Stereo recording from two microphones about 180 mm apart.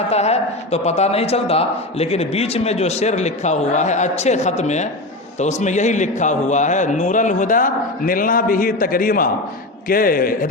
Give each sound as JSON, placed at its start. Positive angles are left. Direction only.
{"t": 0.1, "sound": "a man's voice", "side_deg": 35}